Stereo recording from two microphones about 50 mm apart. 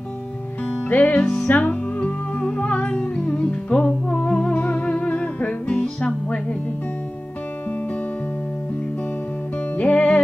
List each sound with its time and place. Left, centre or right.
0.8 s music: left
1.2 s music: centre
1.5 s music: left
2.5 s music: left
9.8 s music: left